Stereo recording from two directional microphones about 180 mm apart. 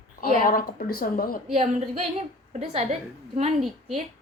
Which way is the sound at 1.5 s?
35° right (ahead or behind).